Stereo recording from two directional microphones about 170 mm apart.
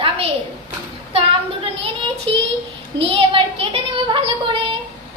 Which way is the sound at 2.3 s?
35° right (ahead or behind).